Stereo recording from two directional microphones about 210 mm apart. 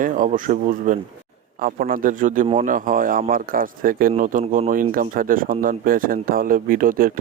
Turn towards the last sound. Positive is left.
turn(degrees=-40)  # may be behind; listen again after turning